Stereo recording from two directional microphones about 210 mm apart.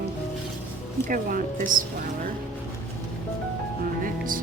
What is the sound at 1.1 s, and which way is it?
Speech, 40° right (ahead or behind).